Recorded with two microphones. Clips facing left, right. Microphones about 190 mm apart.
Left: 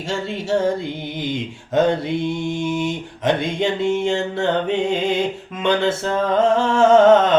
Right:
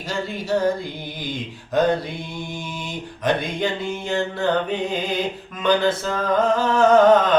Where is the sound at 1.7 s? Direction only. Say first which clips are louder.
Left 2 dB; 25° left (ahead or behind).